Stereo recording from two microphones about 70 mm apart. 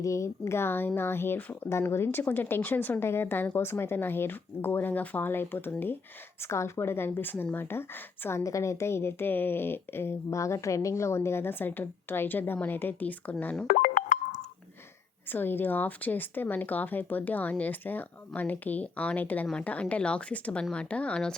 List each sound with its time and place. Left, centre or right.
0.0 s speech: left
6.4 s speech: left
8.4 s speech: left
15.3 s speech: left; by 21.3 s centre